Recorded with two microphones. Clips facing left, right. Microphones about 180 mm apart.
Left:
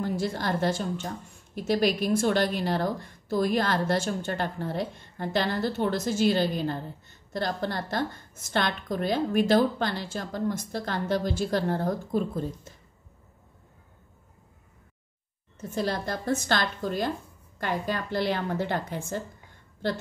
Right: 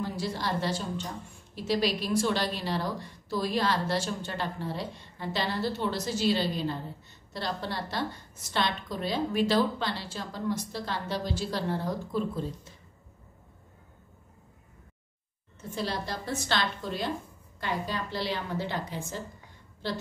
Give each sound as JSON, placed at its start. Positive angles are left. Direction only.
{"t": 0.0, "sound": "a woman's voice", "side_deg": 50}
{"t": 15.7, "sound": "a woman's voice", "side_deg": 45}